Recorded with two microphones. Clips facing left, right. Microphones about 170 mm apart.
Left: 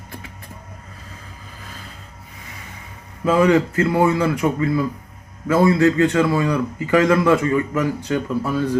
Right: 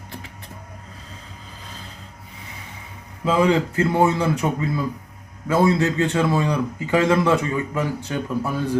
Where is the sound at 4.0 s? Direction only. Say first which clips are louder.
Left 2 dB; 20° right (ahead or behind).